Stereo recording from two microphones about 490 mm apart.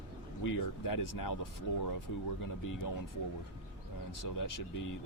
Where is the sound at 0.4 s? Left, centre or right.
Left.